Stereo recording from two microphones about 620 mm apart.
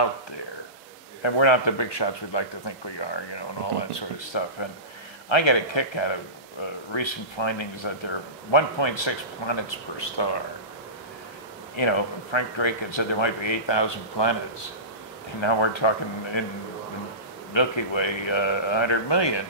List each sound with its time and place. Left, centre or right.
1.2 s speech: left
11.7 s speech: left
15.4 s speech: left
17.6 s speech: left